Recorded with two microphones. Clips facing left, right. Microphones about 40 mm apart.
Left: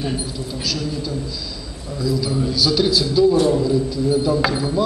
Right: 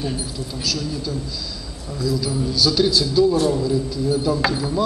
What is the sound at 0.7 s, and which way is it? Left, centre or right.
A man's voice, centre.